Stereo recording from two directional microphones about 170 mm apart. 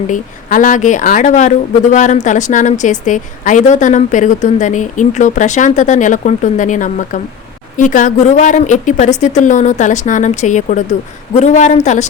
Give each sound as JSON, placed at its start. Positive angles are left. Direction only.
{"t": 0.1, "sound": "speech", "side_deg": 50}